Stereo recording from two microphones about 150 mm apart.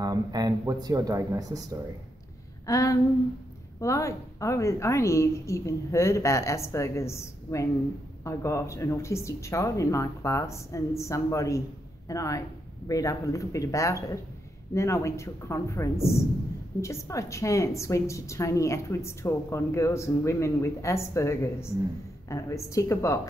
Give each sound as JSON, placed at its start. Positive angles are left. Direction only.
{"t": 0.0, "sound": "speech", "side_deg": -25}
{"t": 2.6, "sound": "a sound", "side_deg": 20}
{"t": 3.8, "sound": "a woman's voice", "side_deg": 20}